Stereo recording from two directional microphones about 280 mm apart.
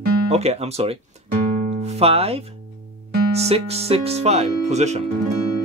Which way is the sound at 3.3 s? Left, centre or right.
Right.